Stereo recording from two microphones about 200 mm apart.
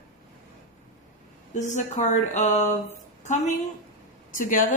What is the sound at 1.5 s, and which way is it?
A woman's voice, 35° left (ahead or behind).